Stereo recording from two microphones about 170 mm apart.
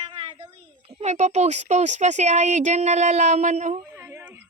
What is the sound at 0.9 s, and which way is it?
Speech, 35° right (ahead or behind).